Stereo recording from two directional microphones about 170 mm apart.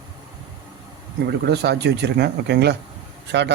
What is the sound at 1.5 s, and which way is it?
Speech, 80° right.